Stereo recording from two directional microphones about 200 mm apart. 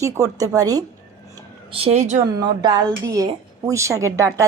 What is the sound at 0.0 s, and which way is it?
Speech, 15° right (ahead or behind).